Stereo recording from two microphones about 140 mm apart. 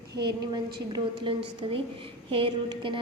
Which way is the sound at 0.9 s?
35° right (ahead or behind).